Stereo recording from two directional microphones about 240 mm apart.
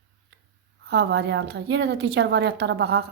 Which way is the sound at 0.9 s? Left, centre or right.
Right.